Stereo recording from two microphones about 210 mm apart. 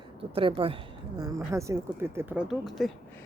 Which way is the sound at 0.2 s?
25° right (ahead or behind).